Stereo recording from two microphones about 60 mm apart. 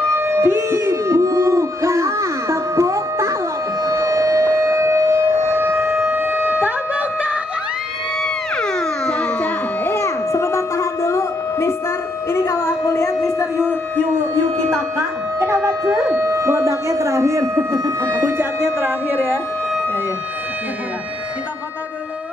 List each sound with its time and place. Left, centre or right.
0.1 s music: right
3.8 s civil defense siren: right
8.5 s music: centre
9.9 s music: left
12.3 s a sound: left
15.0 s a sound: right
18.1 s music: right